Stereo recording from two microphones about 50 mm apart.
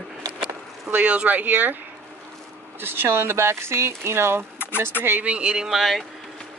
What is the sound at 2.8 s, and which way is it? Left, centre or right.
Speech, right.